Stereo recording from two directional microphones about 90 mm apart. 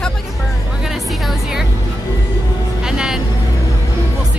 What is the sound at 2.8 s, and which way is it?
Music, 5° right (ahead or behind).